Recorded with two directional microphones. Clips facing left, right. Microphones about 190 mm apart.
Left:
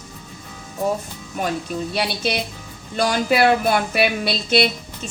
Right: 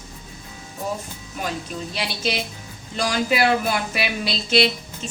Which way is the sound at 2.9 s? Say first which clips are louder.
Left 3 dB; 55° left (ahead or behind).